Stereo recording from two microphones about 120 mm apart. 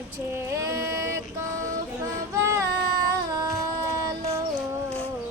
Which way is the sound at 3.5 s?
30° right (ahead or behind).